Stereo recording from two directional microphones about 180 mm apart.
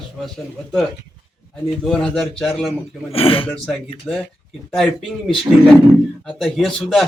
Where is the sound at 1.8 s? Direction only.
5° left (ahead or behind).